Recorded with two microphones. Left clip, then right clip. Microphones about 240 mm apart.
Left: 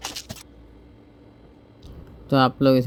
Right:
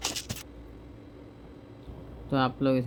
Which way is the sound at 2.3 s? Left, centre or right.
Left.